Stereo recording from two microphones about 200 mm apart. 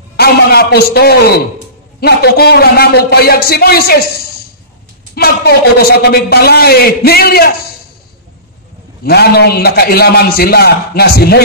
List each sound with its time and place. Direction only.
0.2 s a man's voice: 50° left (ahead or behind)
9.0 s a man's voice: 50° left (ahead or behind)